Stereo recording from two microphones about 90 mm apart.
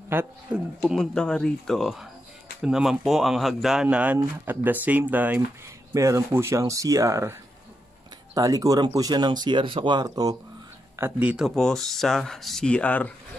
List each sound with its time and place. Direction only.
0.1 s speech: 20° right (ahead or behind)
0.9 s speech: 10° left (ahead or behind); by 5.4 s 20° right (ahead or behind)
5.9 s speech: 35° right (ahead or behind)
8.4 s speech: 40° right (ahead or behind)
11.1 s speech: 15° right (ahead or behind)
11.4 s speech: 5° left (ahead or behind)
12.6 s speech: 15° left (ahead or behind)